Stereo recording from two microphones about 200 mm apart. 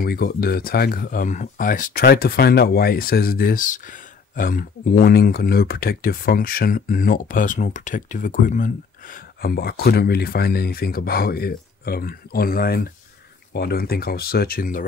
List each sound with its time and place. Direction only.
0.0 s speech: 50° left (ahead or behind)